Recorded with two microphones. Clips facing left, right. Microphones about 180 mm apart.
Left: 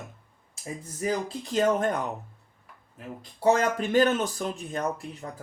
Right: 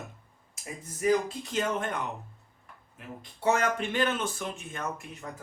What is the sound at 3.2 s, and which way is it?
Speech, 35° left (ahead or behind).